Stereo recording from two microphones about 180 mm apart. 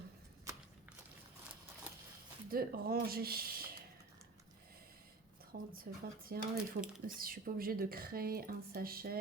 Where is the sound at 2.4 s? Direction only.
55° right (ahead or behind).